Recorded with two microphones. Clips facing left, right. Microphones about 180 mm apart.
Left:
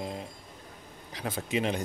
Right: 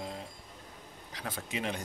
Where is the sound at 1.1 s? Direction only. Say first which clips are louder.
Left 7 dB; 20° left (ahead or behind).